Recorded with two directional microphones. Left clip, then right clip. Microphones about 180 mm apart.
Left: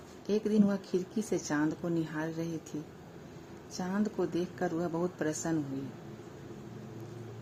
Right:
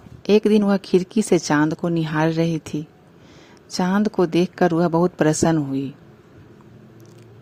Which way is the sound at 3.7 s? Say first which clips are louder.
Right 14 dB; 50° right (ahead or behind).